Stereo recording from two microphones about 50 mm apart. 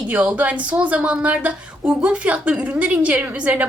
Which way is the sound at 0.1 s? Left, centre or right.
Right.